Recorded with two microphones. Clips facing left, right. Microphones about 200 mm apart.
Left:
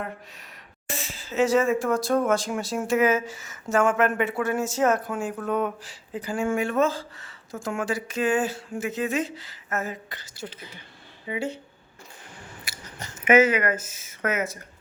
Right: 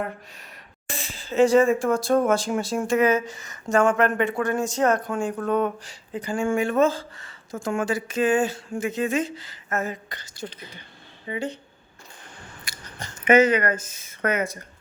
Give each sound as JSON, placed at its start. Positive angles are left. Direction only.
{"t": 0.9, "sound": "speech", "side_deg": 0}
{"t": 2.0, "sound": "speech", "side_deg": -30}
{"t": 2.6, "sound": "speech", "side_deg": 0}
{"t": 12.6, "sound": "speech", "side_deg": 5}